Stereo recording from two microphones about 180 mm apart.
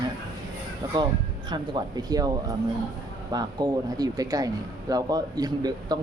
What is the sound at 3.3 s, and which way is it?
Speech, 20° right (ahead or behind).